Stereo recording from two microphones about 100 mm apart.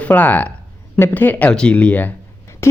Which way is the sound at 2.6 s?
25° left (ahead or behind).